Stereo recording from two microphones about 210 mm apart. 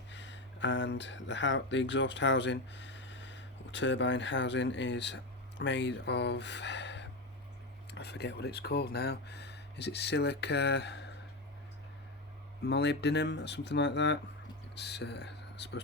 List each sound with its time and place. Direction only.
0.1 s speech: 60° left (ahead or behind)
12.6 s speech: 55° left (ahead or behind)